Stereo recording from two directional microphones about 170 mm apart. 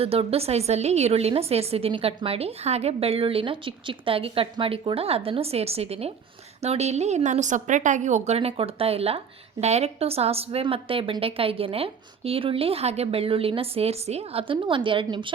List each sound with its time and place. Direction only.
0.0 s a woman's voice: 35° right (ahead or behind)